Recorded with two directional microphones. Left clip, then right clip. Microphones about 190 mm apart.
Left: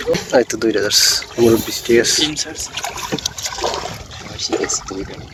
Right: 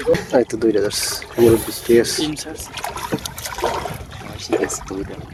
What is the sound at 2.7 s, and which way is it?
Boat, 20° right (ahead or behind).